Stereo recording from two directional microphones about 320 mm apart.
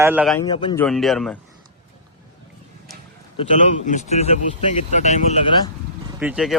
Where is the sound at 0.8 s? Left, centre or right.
Centre.